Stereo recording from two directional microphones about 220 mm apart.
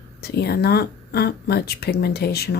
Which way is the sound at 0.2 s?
45° left (ahead or behind).